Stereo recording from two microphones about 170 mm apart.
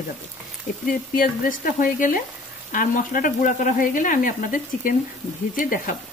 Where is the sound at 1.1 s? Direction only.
55° left (ahead or behind).